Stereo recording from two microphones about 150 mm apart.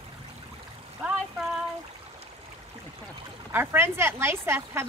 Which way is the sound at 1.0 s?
5° right (ahead or behind).